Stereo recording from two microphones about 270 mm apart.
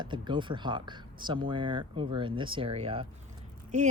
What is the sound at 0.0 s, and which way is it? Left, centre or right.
Speech, centre.